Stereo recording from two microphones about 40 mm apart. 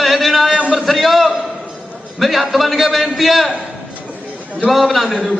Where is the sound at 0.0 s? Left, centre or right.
Centre.